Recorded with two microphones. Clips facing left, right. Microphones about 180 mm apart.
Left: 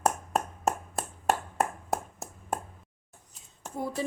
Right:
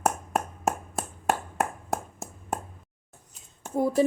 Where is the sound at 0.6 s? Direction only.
Centre (ahead or behind).